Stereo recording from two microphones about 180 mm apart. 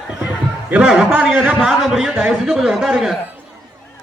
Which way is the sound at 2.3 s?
Centre (ahead or behind).